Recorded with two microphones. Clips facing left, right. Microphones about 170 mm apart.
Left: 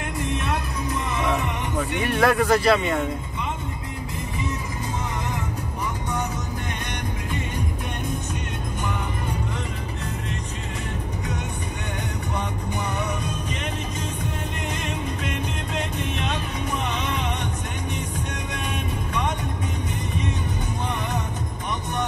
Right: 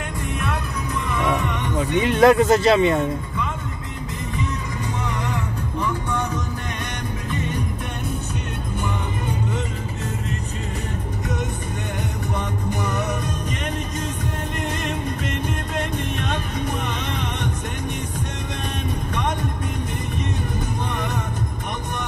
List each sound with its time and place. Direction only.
1.8 s speech: 20° right (ahead or behind)
15.7 s music: 55° right (ahead or behind)